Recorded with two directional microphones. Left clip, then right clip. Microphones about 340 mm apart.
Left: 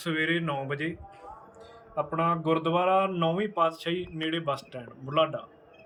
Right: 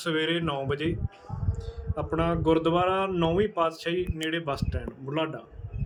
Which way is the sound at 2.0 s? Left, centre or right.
Centre.